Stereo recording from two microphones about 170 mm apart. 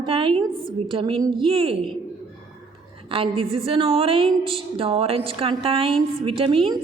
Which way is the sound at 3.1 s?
35° right (ahead or behind).